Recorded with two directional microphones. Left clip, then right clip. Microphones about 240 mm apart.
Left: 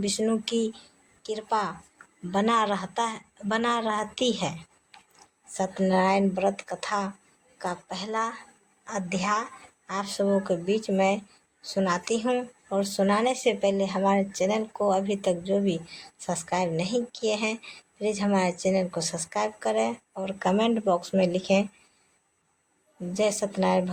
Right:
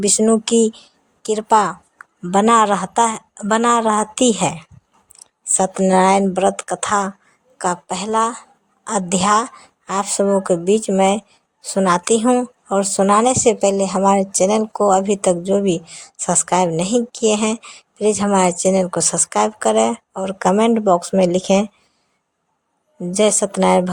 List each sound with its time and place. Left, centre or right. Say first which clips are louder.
0.0 s speech: right 11 dB; right
23.1 s speech: right 10 dB; right